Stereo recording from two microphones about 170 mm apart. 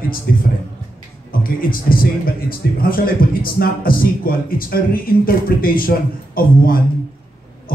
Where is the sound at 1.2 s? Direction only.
55° left (ahead or behind).